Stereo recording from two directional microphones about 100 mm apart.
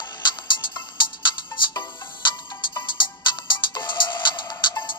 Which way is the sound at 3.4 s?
50° left (ahead or behind).